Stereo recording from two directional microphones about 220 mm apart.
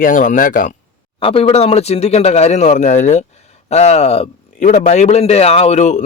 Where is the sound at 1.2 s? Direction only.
25° left (ahead or behind).